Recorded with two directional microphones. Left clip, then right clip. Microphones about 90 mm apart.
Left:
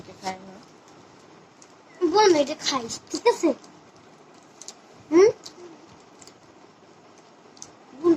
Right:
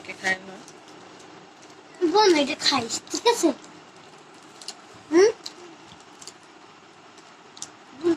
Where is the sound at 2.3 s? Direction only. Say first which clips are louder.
Right 1 dB; 35° right (ahead or behind).